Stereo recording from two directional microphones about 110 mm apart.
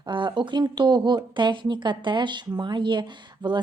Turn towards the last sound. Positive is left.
turn(degrees=-45)  # may be behind; listen again after turning